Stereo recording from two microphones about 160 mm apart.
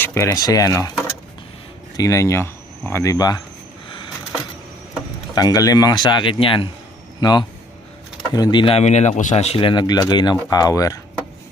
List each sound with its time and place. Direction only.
0.0 s speech: 15° left (ahead or behind)
2.0 s speech: 20° left (ahead or behind)
5.3 s speech: 25° left (ahead or behind)